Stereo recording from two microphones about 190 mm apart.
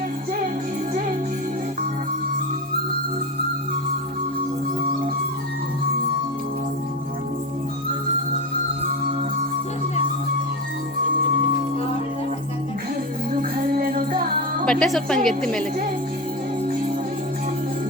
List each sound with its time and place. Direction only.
13.7 s music: 50° right (ahead or behind)
14.6 s a woman's voice: 5° left (ahead or behind)